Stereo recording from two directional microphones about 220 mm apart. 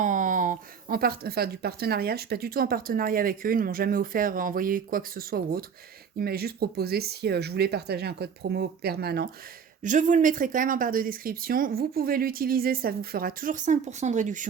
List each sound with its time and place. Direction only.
0.0 s speech: 35° right (ahead or behind)
9.8 s speech: 35° right (ahead or behind)